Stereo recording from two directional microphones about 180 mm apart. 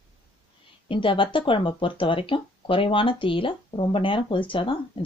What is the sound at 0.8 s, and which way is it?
Speech, 30° left (ahead or behind).